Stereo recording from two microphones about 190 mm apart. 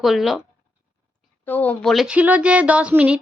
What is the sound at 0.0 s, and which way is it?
Speech, centre (ahead or behind).